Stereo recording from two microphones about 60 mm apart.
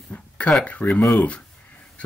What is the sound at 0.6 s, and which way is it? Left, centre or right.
Speech, left.